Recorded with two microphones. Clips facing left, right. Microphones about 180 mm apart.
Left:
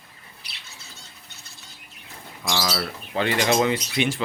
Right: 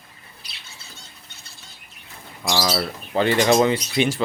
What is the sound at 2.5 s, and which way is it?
Speech, 35° right (ahead or behind).